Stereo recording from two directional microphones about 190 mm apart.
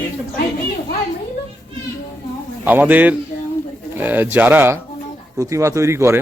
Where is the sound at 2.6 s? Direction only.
10° right (ahead or behind).